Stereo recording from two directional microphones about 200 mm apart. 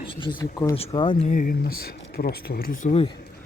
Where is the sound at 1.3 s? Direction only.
45° left (ahead or behind).